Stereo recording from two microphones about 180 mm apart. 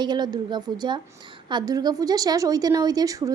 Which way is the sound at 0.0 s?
25° right (ahead or behind).